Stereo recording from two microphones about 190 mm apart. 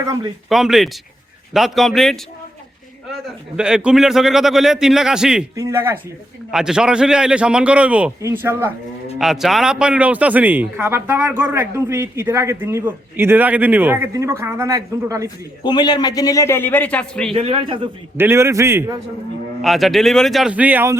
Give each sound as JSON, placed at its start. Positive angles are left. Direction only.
{"t": 0.0, "sound": "speech", "side_deg": -20}
{"t": 0.4, "sound": "a man's voice", "side_deg": 0}
{"t": 3.6, "sound": "a man's voice", "side_deg": -5}
{"t": 15.6, "sound": "a man's voice", "side_deg": 20}
{"t": 17.3, "sound": "speech", "side_deg": -30}
{"t": 18.2, "sound": "speech", "side_deg": -15}
{"t": 19.6, "sound": "a man's voice", "side_deg": 0}